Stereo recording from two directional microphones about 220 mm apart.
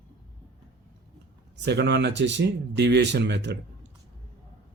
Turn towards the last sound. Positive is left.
turn(degrees=-50)  # may be behind; listen again after turning